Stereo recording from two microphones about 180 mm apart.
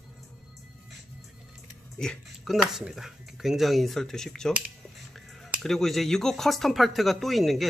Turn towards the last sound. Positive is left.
turn(degrees=0)  # may be behind; listen again after turning